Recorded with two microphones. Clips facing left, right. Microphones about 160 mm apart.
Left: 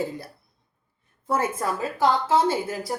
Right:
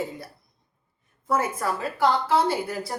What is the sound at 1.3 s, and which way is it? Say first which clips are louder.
A woman's voice: even; 25° left (ahead or behind).